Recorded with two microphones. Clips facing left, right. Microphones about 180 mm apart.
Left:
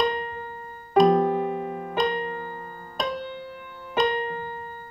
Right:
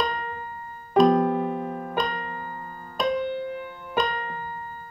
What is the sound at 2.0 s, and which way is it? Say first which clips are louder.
Music: left 6 dB; 30° left (ahead or behind).